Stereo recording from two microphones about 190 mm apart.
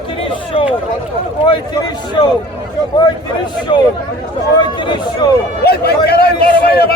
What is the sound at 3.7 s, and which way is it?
Speech, 25° left (ahead or behind).